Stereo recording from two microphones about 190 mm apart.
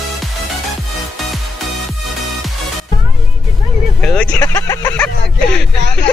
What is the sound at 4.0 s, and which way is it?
Speech, 5° left (ahead or behind).